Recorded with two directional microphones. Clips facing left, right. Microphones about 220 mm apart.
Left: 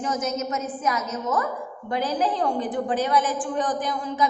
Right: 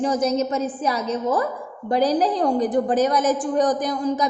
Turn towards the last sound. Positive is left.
turn(degrees=-40)  # may be behind; listen again after turning